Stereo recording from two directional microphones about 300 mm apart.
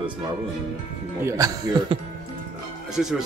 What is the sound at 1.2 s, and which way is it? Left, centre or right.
A man's voice, centre.